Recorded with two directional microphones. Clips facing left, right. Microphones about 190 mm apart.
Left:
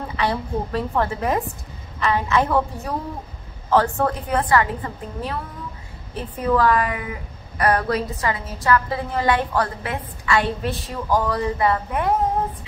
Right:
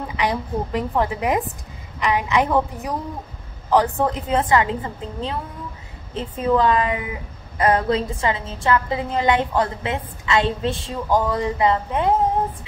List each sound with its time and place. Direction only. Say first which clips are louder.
0.1 s a woman's voice: even; 15° right (ahead or behind)